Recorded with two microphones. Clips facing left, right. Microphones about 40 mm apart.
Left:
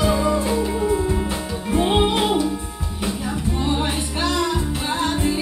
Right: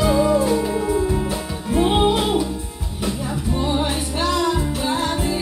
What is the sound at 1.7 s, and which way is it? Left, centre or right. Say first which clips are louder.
Music: right 1 dB; centre.